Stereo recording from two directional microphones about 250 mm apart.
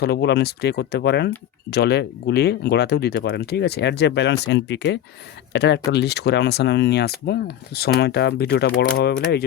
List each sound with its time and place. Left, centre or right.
0.0 s speech: left